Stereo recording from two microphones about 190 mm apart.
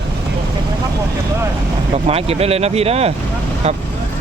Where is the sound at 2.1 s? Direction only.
30° right (ahead or behind).